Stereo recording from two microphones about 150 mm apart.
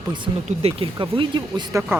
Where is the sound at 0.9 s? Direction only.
25° right (ahead or behind).